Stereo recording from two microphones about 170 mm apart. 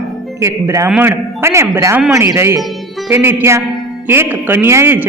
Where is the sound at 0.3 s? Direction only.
15° right (ahead or behind).